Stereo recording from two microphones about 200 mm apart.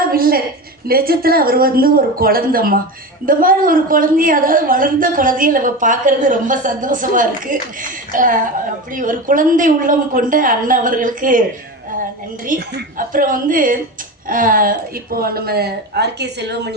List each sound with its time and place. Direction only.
0.1 s a woman's voice: 45° right (ahead or behind)
12.5 s a woman's voice: 50° right (ahead or behind)